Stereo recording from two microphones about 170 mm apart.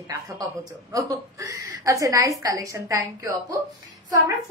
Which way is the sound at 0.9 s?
20° right (ahead or behind).